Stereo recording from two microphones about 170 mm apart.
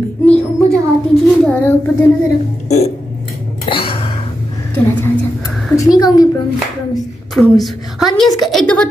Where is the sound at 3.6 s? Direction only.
30° left (ahead or behind).